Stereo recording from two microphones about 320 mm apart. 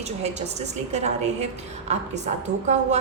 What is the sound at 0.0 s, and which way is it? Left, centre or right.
A woman's voice, right.